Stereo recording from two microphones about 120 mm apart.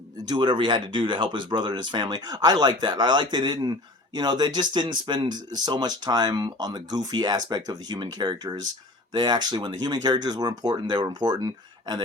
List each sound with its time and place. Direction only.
0.3 s speech: 40° right (ahead or behind)